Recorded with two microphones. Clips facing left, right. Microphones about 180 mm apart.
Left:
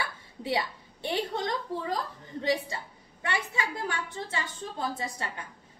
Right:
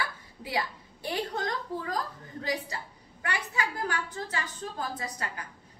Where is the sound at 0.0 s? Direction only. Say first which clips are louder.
Left 1 dB; 25° left (ahead or behind).